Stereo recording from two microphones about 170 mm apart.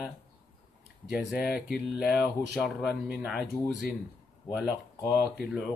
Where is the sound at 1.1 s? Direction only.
Centre (ahead or behind).